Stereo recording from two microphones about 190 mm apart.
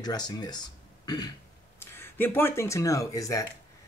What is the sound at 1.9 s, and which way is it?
Speech, 10° left (ahead or behind).